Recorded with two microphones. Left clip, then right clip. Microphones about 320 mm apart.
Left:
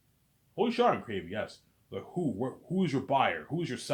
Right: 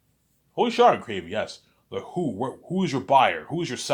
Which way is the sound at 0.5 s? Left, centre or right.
Right.